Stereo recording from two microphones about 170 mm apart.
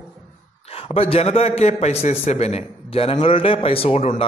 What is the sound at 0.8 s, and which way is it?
A man's voice, 35° left (ahead or behind).